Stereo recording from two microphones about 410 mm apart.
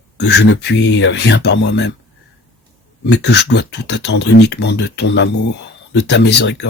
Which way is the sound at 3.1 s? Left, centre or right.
Left.